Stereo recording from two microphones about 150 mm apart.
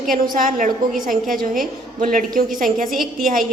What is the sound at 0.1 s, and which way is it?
A woman's voice, 65° right (ahead or behind).